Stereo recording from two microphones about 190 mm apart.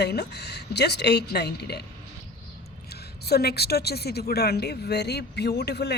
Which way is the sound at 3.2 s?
55° left (ahead or behind).